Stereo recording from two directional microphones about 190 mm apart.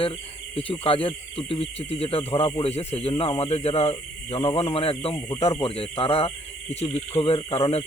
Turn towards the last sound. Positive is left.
turn(degrees=30)  # may be behind; listen again after turning